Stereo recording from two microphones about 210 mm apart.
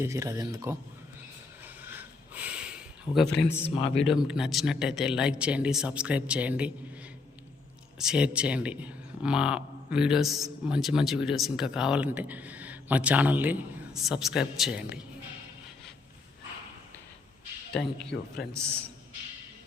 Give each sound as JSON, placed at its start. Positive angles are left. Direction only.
{"t": 0.0, "sound": "speech", "side_deg": -15}
{"t": 1.6, "sound": "a sound", "side_deg": -10}
{"t": 3.9, "sound": "a man's voice", "side_deg": 0}
{"t": 7.9, "sound": "a man's voice", "side_deg": -5}
{"t": 17.7, "sound": "a man's voice", "side_deg": 5}